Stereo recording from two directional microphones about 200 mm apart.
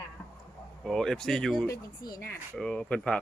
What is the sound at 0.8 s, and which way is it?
Speech, centre (ahead or behind).